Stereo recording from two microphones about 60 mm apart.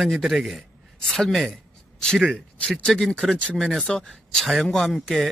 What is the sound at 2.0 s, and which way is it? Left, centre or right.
Speech, centre.